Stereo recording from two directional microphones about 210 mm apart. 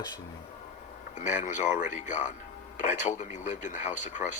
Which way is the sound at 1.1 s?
35° left (ahead or behind).